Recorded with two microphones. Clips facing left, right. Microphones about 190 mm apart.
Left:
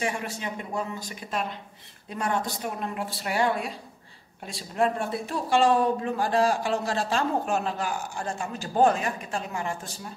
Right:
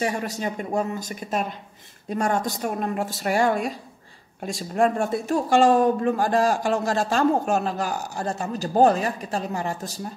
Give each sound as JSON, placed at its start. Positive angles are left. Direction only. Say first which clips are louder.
{"t": 0.0, "sound": "speech", "louder": "right 5 dB", "side_deg": -40}